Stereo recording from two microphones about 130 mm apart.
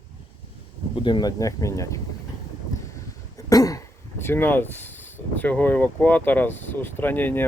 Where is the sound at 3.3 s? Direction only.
25° left (ahead or behind).